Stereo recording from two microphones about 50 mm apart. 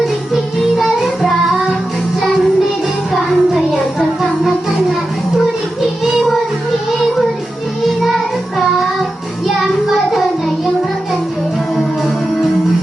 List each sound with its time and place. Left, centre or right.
0.8 s child singing: centre
3.1 s music: centre
8.0 s child singing: centre